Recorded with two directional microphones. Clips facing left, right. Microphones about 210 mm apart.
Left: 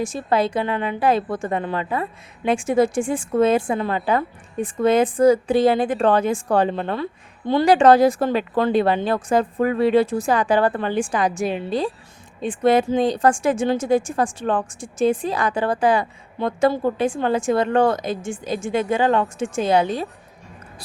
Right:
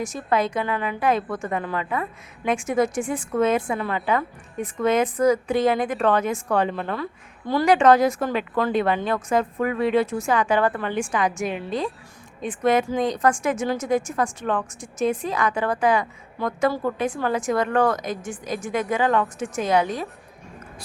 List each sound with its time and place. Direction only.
0.0 s a woman's voice: 30° left (ahead or behind)